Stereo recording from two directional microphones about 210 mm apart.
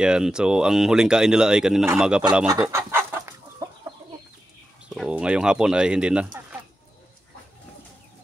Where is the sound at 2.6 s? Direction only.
10° right (ahead or behind).